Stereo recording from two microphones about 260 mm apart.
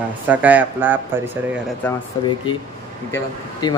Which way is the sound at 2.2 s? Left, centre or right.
Centre.